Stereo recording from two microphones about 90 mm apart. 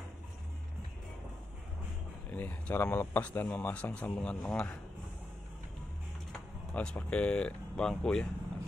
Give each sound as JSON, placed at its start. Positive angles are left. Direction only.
{"t": 2.3, "sound": "speech", "side_deg": 25}
{"t": 6.7, "sound": "speech", "side_deg": 10}